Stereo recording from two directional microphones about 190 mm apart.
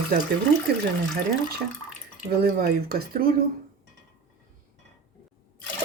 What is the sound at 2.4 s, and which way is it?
Speech, 55° right (ahead or behind).